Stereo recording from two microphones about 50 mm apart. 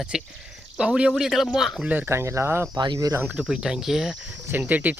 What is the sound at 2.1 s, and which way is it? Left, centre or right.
Speech, right.